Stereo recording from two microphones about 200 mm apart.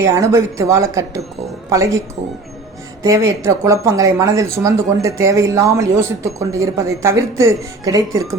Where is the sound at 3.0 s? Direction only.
15° right (ahead or behind).